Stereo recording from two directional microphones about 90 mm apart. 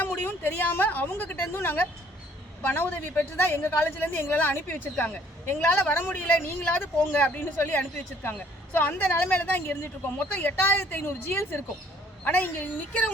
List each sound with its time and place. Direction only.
0.0 s a woman's voice: 20° left (ahead or behind)